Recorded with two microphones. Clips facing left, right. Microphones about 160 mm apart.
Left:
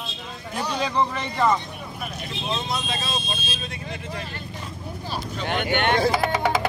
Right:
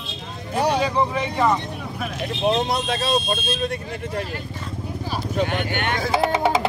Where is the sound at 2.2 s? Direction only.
60° right (ahead or behind).